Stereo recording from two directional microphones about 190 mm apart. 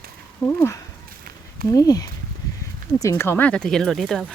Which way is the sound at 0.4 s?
15° left (ahead or behind).